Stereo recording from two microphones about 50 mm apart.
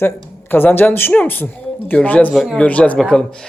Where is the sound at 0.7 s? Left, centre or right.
Left.